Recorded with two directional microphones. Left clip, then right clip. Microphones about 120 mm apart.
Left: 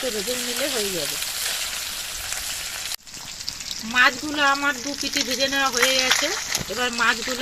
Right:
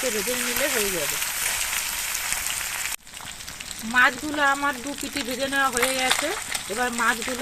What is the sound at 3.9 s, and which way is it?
Speech, 5° right (ahead or behind).